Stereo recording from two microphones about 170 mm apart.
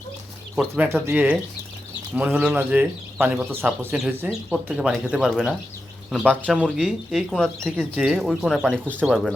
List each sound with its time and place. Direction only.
0.5 s speech: 10° right (ahead or behind)